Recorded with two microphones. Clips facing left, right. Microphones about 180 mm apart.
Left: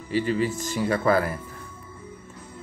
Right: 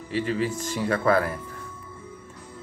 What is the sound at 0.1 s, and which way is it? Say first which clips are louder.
Speech: left 2 dB; centre (ahead or behind).